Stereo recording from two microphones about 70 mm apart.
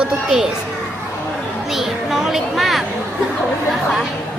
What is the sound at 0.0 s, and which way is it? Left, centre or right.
Speech, centre.